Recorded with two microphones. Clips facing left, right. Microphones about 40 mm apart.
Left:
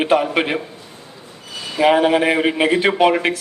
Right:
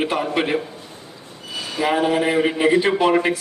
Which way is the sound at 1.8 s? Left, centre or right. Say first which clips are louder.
Left 5 dB; left.